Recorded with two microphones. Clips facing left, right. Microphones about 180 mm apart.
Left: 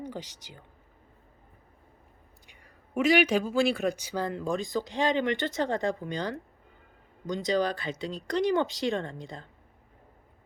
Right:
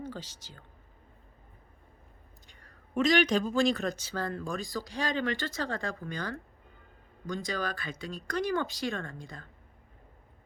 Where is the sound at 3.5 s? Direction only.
10° left (ahead or behind).